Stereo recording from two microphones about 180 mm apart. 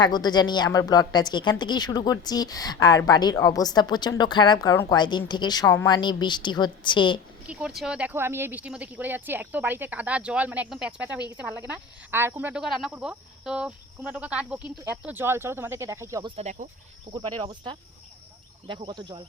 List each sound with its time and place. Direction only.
0.0 s speech: 25° left (ahead or behind)
7.4 s speech: 5° right (ahead or behind)
16.3 s speech: 40° right (ahead or behind)
17.1 s speech: 30° right (ahead or behind)